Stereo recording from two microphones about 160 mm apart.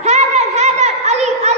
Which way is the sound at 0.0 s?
45° right (ahead or behind).